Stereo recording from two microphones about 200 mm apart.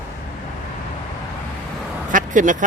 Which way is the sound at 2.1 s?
40° right (ahead or behind).